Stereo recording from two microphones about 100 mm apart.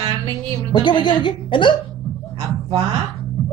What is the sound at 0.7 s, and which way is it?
A woman's voice, 55° left (ahead or behind).